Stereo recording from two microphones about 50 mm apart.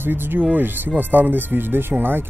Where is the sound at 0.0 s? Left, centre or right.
Right.